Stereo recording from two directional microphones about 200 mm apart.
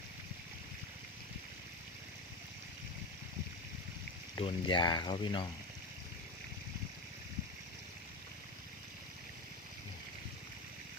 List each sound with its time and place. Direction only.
4.4 s speech: 25° left (ahead or behind)